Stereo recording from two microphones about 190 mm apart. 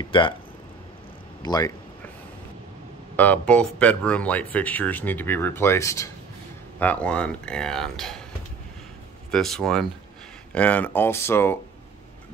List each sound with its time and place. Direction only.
0.0 s speech: 25° left (ahead or behind)
1.4 s speech: 20° left (ahead or behind)
3.2 s speech: 5° left (ahead or behind)
9.3 s speech: centre (ahead or behind)